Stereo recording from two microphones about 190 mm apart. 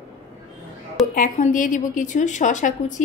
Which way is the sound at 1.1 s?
45° left (ahead or behind).